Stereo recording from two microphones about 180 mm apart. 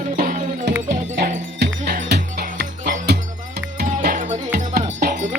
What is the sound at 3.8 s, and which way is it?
Music, 45° right (ahead or behind).